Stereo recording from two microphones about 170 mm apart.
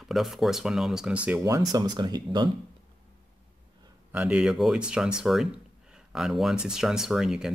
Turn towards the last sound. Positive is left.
turn(degrees=-5)  # may be behind; listen again after turning